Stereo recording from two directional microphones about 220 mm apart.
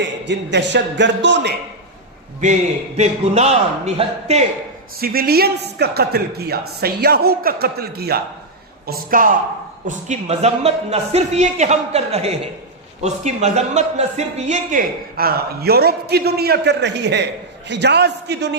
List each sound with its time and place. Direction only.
0.0 s a man's voice: 55° right (ahead or behind)
3.0 s speech: 30° right (ahead or behind)
4.9 s a man's voice: 45° right (ahead or behind)